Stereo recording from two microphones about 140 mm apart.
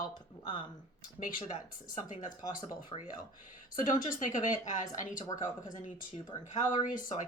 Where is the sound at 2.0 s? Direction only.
65° left (ahead or behind).